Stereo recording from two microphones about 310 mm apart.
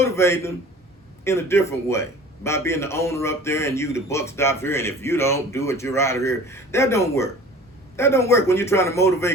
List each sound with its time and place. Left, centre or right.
0.0 s a man's voice: centre